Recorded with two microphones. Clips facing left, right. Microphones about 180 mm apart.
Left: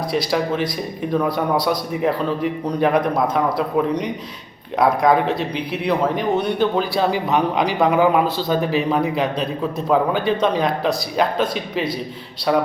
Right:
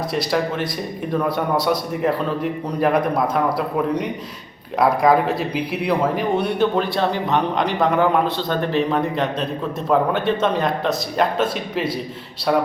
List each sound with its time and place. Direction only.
0.1 s a man's voice: centre (ahead or behind)